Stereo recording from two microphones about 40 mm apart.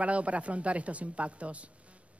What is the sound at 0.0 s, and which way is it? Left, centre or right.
A man's voice, right.